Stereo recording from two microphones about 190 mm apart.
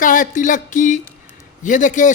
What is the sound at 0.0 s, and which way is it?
Music, 45° left (ahead or behind).